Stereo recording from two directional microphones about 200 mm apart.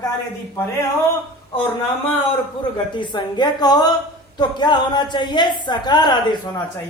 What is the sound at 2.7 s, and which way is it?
A woman's voice, 25° left (ahead or behind).